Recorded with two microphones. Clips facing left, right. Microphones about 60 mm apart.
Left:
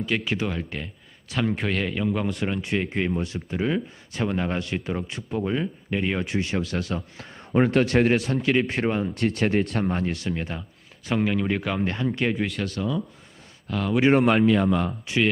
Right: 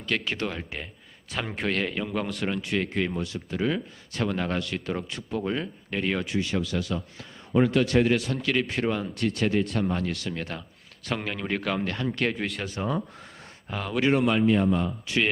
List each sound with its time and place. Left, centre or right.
0.0 s speech: centre
3.2 s speech: left; by 6.2 s centre
6.2 s a man's voice: left
8.1 s speech: left
9.1 s a man's voice: left
9.8 s speech: left
10.1 s speech: centre
13.7 s speech: centre
14.3 s a man's voice: left
15.1 s speech: left